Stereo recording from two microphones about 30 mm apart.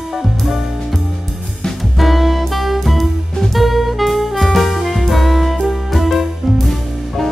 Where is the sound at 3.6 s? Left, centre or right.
Centre.